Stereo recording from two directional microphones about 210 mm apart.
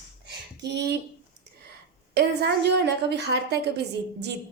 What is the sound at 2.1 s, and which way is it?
A woman's voice, 50° right (ahead or behind).